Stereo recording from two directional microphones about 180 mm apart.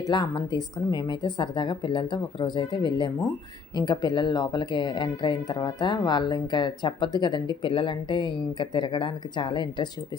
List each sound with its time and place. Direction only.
0.0 s speech: 20° left (ahead or behind)